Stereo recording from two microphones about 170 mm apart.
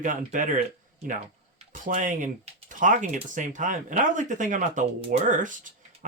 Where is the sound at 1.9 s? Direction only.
50° right (ahead or behind).